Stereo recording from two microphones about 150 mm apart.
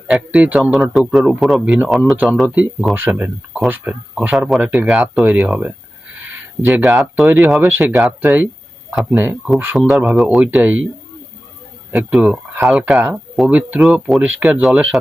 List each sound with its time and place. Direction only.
0.1 s speech: 5° right (ahead or behind)
6.9 s speech: centre (ahead or behind)
7.6 s speech: 15° right (ahead or behind)
9.7 s speech: centre (ahead or behind)
11.9 s speech: 5° right (ahead or behind)